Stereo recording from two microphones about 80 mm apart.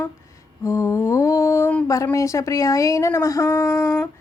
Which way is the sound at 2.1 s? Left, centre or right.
Left.